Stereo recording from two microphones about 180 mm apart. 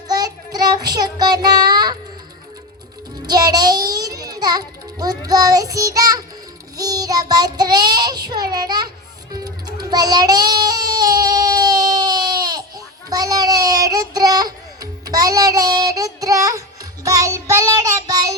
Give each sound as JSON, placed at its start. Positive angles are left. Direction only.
{"t": 0.1, "sound": "child singing", "side_deg": -20}
{"t": 3.2, "sound": "a child's voice", "side_deg": -20}
{"t": 6.7, "sound": "child singing", "side_deg": -20}
{"t": 9.3, "sound": "music", "side_deg": -20}